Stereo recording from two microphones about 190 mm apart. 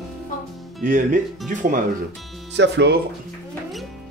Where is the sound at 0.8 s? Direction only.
40° right (ahead or behind).